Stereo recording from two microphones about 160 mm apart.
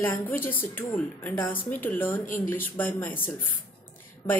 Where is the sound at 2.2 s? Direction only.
55° left (ahead or behind).